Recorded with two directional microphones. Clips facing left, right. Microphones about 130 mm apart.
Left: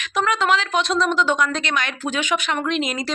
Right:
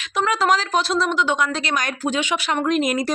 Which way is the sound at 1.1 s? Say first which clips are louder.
Left 1 dB; 15° right (ahead or behind).